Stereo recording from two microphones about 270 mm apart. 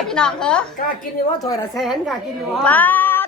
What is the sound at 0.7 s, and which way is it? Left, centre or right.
Speech, left.